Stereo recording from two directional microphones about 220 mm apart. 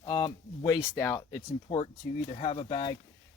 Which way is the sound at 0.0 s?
20° left (ahead or behind).